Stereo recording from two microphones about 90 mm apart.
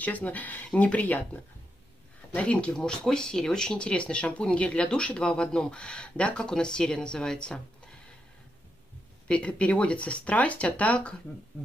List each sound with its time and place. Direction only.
0.0 s speech: 20° left (ahead or behind)
9.3 s speech: 15° left (ahead or behind)